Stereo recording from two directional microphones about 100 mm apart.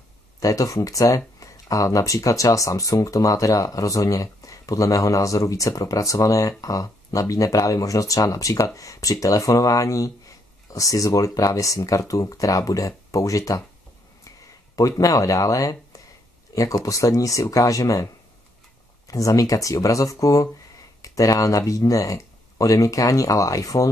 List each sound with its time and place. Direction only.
0.4 s speech: 35° left (ahead or behind)
14.8 s speech: 35° left (ahead or behind)
19.0 s speech: 35° left (ahead or behind)